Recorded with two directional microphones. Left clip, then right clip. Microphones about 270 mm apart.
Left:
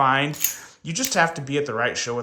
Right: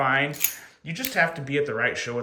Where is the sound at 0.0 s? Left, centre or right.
Centre.